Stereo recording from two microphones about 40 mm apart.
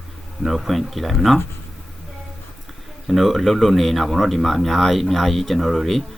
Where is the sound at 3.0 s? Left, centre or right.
Centre.